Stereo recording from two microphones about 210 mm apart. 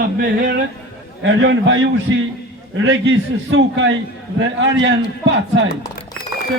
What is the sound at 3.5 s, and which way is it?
A man's voice, 60° right (ahead or behind).